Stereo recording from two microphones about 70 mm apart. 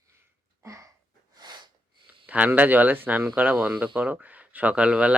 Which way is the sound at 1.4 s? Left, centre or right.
Right.